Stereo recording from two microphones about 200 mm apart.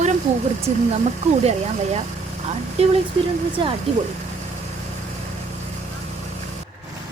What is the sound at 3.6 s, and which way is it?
Speech, 25° right (ahead or behind).